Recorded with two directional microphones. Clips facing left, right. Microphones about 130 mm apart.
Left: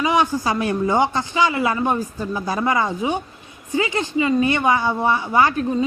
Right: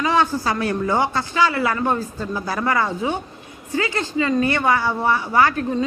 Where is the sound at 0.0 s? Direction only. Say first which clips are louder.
Even; 15° left (ahead or behind).